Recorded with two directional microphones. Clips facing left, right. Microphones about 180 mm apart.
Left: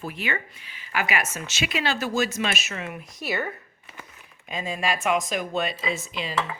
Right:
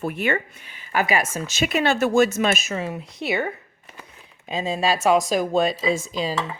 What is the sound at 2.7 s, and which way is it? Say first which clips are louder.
Speech: right 6 dB; 30° right (ahead or behind).